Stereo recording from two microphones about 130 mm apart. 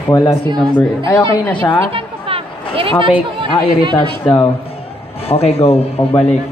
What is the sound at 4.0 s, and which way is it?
Speech, 40° left (ahead or behind).